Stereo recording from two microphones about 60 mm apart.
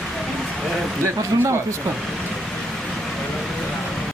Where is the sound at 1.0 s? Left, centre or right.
Right.